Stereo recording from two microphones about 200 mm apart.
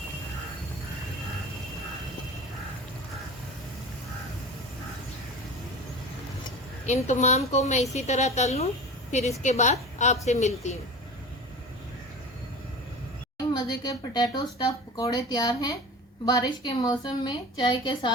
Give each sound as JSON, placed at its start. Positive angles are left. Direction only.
{"t": 6.8, "sound": "a woman's voice", "side_deg": 35}
{"t": 13.5, "sound": "a woman's voice", "side_deg": 20}